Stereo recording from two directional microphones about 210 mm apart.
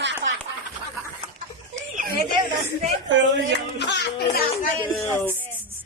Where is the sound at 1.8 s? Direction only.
40° right (ahead or behind).